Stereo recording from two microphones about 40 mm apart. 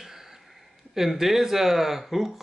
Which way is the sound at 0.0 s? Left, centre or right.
Centre.